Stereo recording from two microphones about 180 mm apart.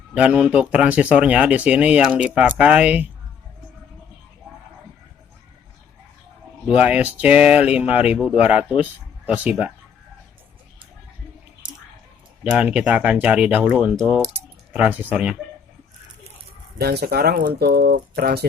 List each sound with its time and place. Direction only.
0.1 s speech: 5° right (ahead or behind)
6.7 s speech: 5° right (ahead or behind)
12.4 s speech: 5° right (ahead or behind)
16.8 s speech: 65° right (ahead or behind)